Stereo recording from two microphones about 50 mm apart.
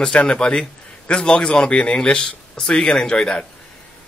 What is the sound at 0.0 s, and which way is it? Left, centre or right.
Speech, left.